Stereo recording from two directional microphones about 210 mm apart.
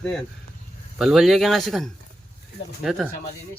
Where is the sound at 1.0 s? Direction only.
Centre (ahead or behind).